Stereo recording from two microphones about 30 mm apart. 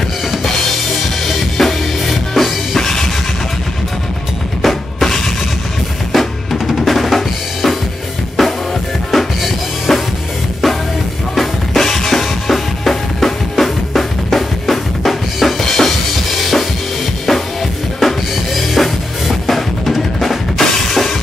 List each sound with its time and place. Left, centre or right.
1.6 s music: centre
4.6 s drum kit: centre
6.1 s drum: centre
8.4 s drum kit: centre
11.3 s drum kit: centre
15.6 s music: centre
16.3 s drum kit: centre